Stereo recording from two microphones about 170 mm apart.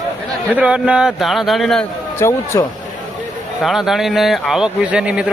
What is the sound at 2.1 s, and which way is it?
Speech, 15° left (ahead or behind).